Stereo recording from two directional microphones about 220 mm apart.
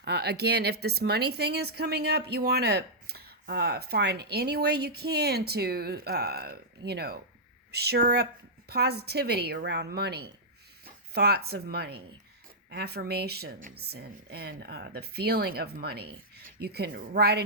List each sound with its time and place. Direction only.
0.0 s speech: 50° right (ahead or behind)